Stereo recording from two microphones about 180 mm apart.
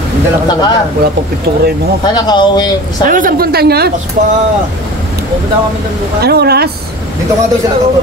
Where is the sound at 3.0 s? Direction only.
50° right (ahead or behind).